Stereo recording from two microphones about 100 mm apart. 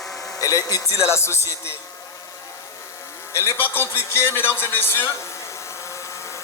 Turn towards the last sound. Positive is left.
turn(degrees=20)  # may be behind; listen again after turning